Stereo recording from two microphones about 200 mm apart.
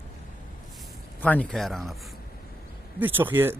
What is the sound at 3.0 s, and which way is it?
Speech, 10° right (ahead or behind).